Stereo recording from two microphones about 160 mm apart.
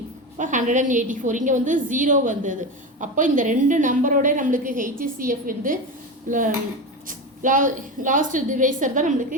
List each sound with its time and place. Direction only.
0.3 s a woman's voice: 50° right (ahead or behind)